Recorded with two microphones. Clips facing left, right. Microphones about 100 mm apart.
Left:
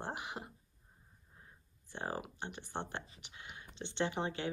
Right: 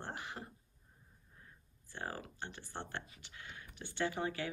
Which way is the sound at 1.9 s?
20° left (ahead or behind).